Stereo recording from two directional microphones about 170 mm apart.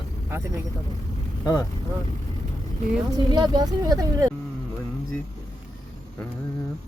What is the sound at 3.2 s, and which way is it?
Speech, 25° right (ahead or behind).